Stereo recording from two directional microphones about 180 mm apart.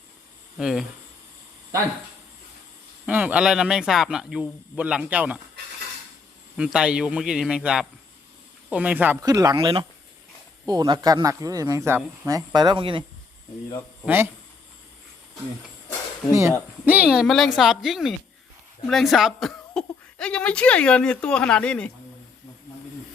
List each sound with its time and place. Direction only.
0.6 s speech: centre (ahead or behind)
3.1 s speech: 10° right (ahead or behind)
6.6 s speech: 5° right (ahead or behind)
9.2 s speech: 20° right (ahead or behind)
14.0 s speech: 10° right (ahead or behind)
16.3 s speech: 15° right (ahead or behind); by 21.9 s 5° left (ahead or behind)